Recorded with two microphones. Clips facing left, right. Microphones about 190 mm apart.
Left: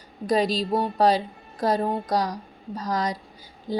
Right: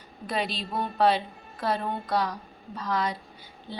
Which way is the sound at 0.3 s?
40° left (ahead or behind).